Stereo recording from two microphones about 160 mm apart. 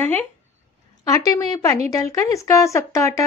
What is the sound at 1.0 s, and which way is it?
A woman's voice, 20° left (ahead or behind).